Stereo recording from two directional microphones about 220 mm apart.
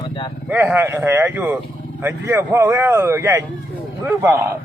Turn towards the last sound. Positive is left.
turn(degrees=-10)  # may be behind; listen again after turning